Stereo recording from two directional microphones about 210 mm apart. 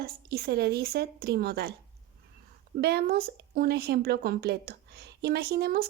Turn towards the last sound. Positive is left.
turn(degrees=-45)  # may be behind; listen again after turning